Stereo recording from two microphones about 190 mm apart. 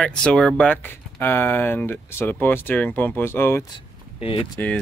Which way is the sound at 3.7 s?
30° left (ahead or behind).